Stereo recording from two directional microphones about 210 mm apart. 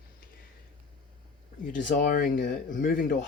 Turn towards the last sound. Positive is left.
turn(degrees=45)  # may be behind; listen again after turning